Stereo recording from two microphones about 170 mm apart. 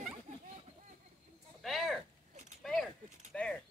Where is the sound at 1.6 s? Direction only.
Centre (ahead or behind).